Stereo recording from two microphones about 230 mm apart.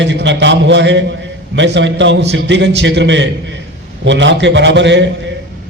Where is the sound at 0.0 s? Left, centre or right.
Right.